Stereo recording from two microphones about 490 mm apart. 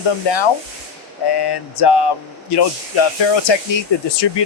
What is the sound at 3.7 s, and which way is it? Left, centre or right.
Speech, left.